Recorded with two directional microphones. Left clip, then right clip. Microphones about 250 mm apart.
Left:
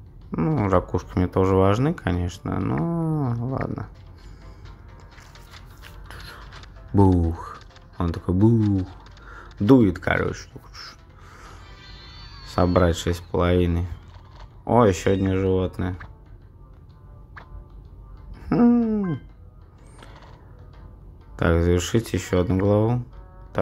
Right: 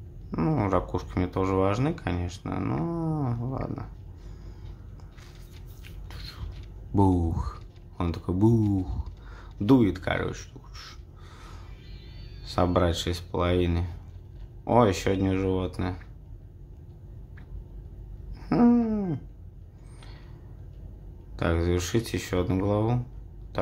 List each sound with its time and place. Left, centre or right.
0.3 s speech: centre
6.0 s music: centre
7.0 s speech: centre
9.3 s a sound: centre
11.9 s music: centre
12.7 s speech: centre
18.4 s a sound: centre
21.4 s speech: centre
23.5 s music: centre